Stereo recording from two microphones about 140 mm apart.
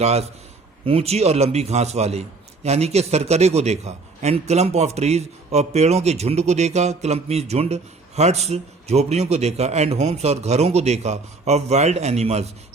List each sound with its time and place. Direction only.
0.0 s a man's voice: 50° right (ahead or behind)